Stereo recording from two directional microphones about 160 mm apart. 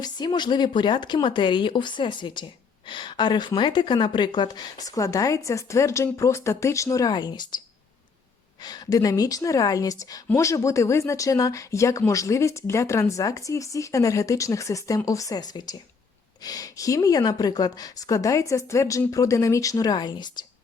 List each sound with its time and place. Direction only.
0.0 s speech: 25° left (ahead or behind)
8.6 s speech: 25° left (ahead or behind)